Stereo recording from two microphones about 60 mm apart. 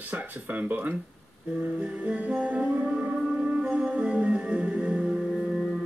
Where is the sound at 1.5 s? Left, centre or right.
Centre.